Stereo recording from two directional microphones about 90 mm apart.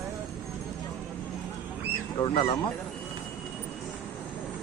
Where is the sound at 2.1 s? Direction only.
65° left (ahead or behind).